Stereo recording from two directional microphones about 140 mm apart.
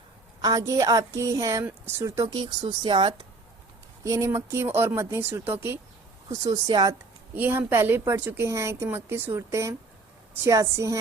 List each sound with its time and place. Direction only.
0.4 s a woman's voice: 25° right (ahead or behind)
2.4 s speech: 30° right (ahead or behind)
4.0 s speech: 20° right (ahead or behind)
6.4 s a woman's voice: 30° right (ahead or behind)
7.3 s a woman's voice: 15° right (ahead or behind)